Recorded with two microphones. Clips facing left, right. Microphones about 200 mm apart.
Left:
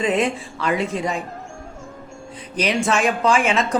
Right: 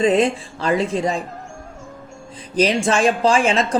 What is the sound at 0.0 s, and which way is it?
Speech, 30° right (ahead or behind).